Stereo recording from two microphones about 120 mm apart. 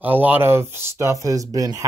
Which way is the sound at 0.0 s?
15° right (ahead or behind).